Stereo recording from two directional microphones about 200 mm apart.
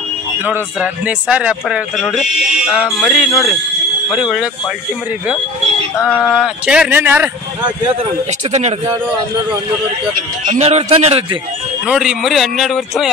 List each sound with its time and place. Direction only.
0.5 s speech: 5° right (ahead or behind)
6.0 s speech: 5° left (ahead or behind)
8.0 s a man's voice: 35° right (ahead or behind)
10.4 s a man's voice: 35° right (ahead or behind)
11.8 s speech: 5° right (ahead or behind)